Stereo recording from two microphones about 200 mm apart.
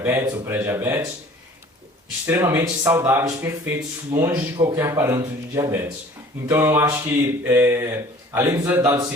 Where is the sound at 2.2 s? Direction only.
10° right (ahead or behind).